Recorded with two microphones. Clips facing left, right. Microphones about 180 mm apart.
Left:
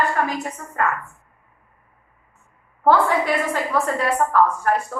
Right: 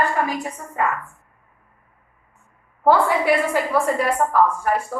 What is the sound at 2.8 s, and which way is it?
A woman's voice, 10° right (ahead or behind).